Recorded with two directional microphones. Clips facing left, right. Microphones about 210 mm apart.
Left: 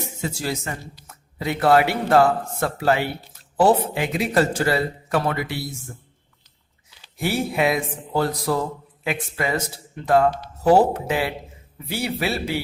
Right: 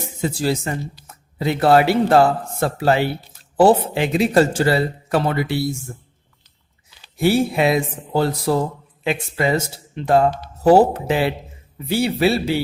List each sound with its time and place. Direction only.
0.2 s speech: 30° right (ahead or behind)
7.2 s speech: 30° right (ahead or behind)